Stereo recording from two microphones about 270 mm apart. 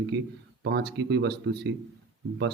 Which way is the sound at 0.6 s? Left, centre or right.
Right.